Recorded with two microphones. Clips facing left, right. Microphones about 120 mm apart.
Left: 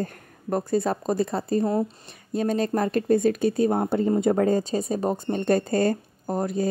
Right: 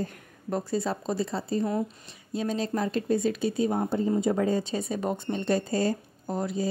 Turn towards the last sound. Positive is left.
turn(degrees=50)  # may be behind; listen again after turning